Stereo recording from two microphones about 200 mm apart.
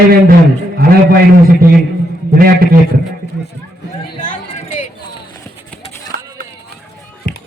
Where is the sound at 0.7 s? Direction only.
50° right (ahead or behind).